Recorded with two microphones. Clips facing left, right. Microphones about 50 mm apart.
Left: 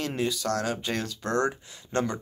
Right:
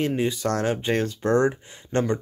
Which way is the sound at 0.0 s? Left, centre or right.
Right.